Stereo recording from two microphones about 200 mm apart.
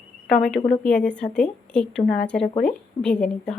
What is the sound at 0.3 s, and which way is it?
A woman's voice, 5° left (ahead or behind).